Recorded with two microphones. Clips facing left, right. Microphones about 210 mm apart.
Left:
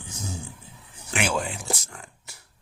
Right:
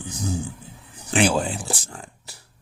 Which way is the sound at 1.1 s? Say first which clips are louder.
Right 7 dB; 30° right (ahead or behind).